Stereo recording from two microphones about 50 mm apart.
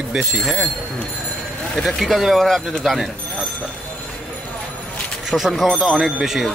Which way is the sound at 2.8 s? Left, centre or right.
Centre.